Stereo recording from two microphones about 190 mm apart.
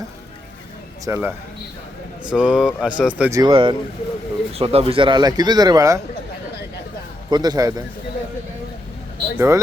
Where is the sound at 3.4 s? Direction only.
25° right (ahead or behind).